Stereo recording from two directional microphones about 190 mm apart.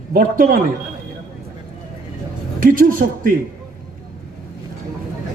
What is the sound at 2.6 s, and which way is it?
Speech, 45° right (ahead or behind).